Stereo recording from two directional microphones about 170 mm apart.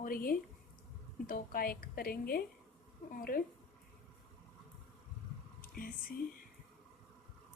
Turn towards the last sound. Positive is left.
turn(degrees=60)  # may be behind; listen again after turning